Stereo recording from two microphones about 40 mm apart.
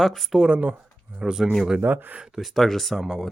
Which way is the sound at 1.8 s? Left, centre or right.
Right.